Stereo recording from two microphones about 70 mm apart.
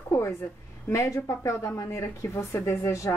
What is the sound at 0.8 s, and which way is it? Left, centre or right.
Speech, left.